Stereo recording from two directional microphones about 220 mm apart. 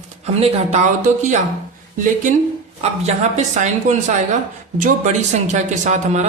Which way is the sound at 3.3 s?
35° right (ahead or behind).